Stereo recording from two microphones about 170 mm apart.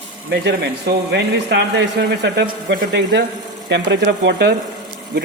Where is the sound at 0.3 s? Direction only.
75° right (ahead or behind).